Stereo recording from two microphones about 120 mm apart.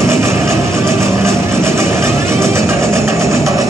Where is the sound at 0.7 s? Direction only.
25° right (ahead or behind).